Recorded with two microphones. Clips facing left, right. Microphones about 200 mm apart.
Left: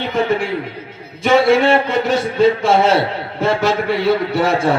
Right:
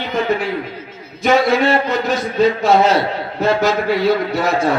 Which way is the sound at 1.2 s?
30° left (ahead or behind).